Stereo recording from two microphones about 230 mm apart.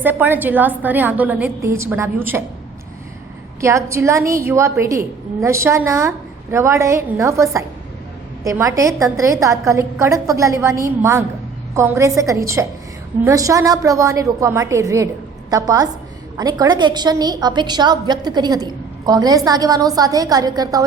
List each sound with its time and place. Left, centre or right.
0.0 s a woman's voice: centre
3.6 s a woman's voice: centre